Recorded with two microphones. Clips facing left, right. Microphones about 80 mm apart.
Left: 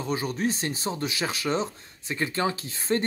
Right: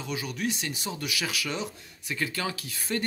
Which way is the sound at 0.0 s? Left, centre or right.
Left.